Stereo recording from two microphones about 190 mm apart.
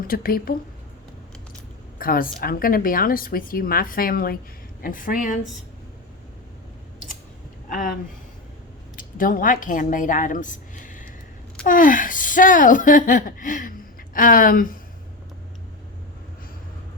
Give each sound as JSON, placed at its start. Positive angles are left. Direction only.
{"t": 0.1, "sound": "a woman's voice", "side_deg": 50}
{"t": 2.0, "sound": "a woman's voice", "side_deg": 50}
{"t": 7.7, "sound": "speech", "side_deg": 45}
{"t": 9.0, "sound": "a woman's voice", "side_deg": 45}